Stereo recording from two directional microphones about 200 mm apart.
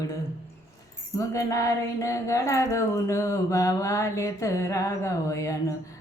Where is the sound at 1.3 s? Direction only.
15° left (ahead or behind).